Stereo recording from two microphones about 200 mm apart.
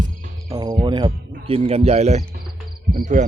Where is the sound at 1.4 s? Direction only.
30° right (ahead or behind).